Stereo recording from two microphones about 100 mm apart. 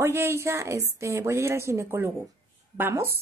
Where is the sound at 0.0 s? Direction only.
25° right (ahead or behind).